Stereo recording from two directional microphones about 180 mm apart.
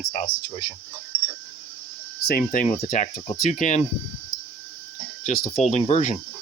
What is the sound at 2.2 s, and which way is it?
Speech, 55° left (ahead or behind).